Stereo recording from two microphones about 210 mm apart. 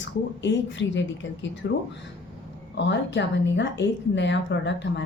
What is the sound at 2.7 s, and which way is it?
Speech, 60° left (ahead or behind).